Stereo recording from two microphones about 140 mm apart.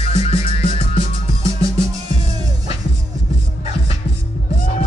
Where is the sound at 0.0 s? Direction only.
45° left (ahead or behind).